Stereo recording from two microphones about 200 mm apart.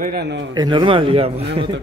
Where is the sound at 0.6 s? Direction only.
20° right (ahead or behind).